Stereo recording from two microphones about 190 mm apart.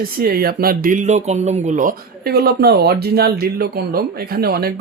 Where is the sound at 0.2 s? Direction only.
55° right (ahead or behind).